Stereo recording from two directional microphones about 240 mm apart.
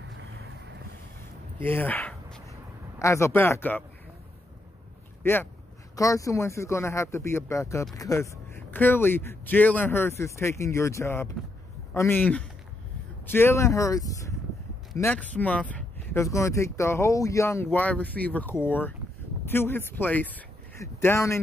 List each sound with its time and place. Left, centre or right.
1.6 s speech: centre
5.2 s speech: centre